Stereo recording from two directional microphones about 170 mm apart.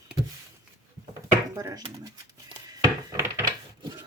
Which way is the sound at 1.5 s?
20° right (ahead or behind).